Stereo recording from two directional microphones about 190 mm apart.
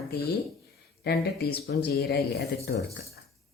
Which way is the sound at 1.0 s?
55° left (ahead or behind).